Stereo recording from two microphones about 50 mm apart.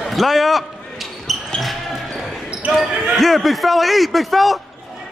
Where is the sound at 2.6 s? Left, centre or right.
Right.